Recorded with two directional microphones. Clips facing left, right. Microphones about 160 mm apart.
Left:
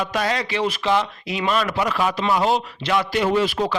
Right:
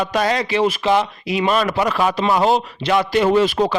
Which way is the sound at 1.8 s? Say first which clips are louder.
Right 3 dB; 40° right (ahead or behind).